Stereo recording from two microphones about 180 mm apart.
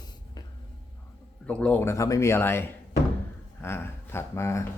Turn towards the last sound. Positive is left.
turn(degrees=15)  # may be behind; listen again after turning